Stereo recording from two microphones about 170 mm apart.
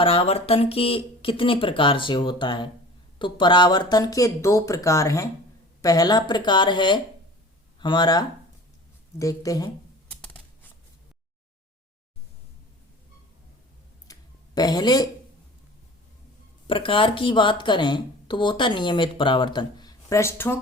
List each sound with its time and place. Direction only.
0.0 s speech: 35° left (ahead or behind)
10.1 s typing: 10° left (ahead or behind)
14.1 s a sound: 25° left (ahead or behind)
16.6 s speech: 30° left (ahead or behind); by 20.6 s 15° left (ahead or behind)